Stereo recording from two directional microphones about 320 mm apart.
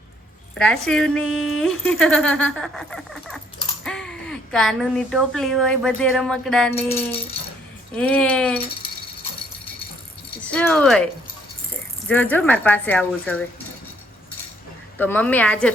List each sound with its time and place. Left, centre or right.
0.6 s a woman's voice: centre
7.1 s rattle: centre
7.9 s a woman's voice: centre
10.4 s a woman's voice: centre
14.9 s a woman's voice: centre